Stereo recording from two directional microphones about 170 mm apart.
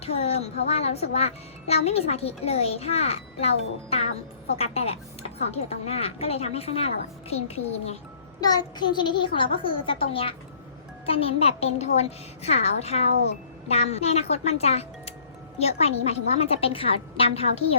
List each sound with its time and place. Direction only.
0.0 s a child's voice: 35° left (ahead or behind)
4.5 s a child's voice: 35° left (ahead or behind)
8.4 s a child's voice: 25° left (ahead or behind)